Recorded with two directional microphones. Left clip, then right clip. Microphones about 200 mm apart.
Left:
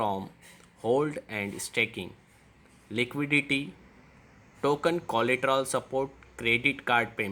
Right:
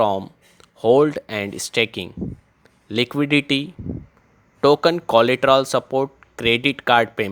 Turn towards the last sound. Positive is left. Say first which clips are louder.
# right 10 dB
turn(degrees=-35)  # may be behind; listen again after turning